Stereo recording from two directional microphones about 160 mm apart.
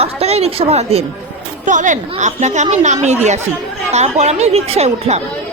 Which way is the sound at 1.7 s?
50° right (ahead or behind).